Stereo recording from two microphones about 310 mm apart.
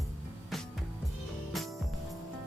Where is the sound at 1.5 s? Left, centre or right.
Centre.